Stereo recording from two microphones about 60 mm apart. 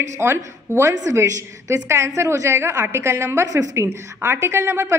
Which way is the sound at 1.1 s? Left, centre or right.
Right.